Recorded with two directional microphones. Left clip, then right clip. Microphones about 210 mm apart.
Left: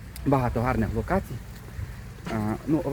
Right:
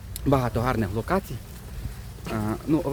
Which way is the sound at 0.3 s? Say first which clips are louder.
Right 1 dB; 5° right (ahead or behind).